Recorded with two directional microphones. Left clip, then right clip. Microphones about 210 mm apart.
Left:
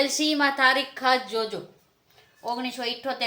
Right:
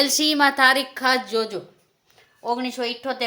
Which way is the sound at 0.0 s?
50° right (ahead or behind).